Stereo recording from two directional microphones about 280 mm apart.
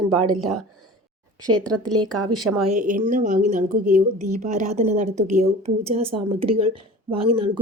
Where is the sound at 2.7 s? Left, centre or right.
Right.